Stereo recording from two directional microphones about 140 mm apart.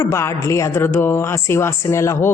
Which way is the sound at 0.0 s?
20° left (ahead or behind).